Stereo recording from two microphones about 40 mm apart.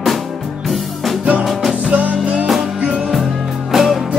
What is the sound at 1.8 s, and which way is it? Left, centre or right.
Music, right.